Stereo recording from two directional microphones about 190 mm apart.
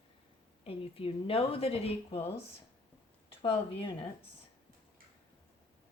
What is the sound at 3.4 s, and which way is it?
Speech, 25° left (ahead or behind).